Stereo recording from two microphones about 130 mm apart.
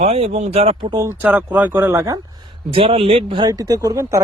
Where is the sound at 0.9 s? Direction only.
20° right (ahead or behind).